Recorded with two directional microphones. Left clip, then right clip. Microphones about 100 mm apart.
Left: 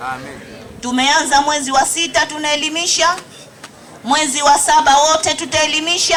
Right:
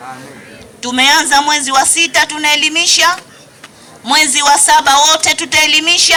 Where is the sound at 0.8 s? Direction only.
30° right (ahead or behind).